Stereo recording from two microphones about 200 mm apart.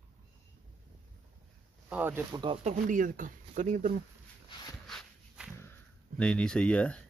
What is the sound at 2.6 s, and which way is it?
Speech, 40° right (ahead or behind).